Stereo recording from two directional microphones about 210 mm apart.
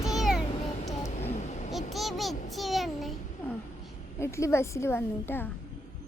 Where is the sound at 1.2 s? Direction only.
35° left (ahead or behind).